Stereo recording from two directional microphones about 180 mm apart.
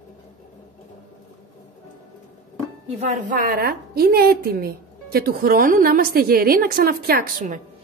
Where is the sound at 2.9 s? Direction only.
45° right (ahead or behind).